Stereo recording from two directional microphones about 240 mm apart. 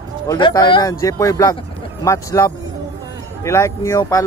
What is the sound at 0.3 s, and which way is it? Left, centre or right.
Speech, centre.